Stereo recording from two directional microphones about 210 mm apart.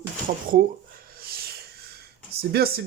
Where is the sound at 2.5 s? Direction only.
45° right (ahead or behind).